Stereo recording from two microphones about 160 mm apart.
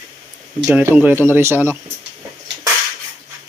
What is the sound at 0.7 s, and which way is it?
Speech, 10° right (ahead or behind).